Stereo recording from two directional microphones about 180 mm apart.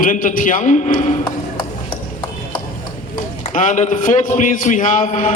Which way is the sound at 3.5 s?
45° left (ahead or behind).